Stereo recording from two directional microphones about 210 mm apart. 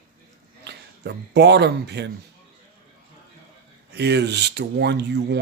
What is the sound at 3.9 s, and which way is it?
Speech, 55° right (ahead or behind).